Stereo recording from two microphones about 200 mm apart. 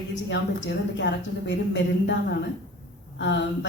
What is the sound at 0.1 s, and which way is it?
A woman's voice, 65° left (ahead or behind).